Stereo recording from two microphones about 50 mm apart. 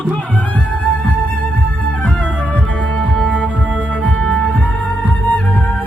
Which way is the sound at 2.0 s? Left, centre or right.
Left.